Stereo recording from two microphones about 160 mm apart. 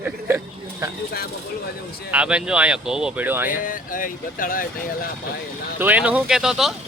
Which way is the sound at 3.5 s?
60° left (ahead or behind).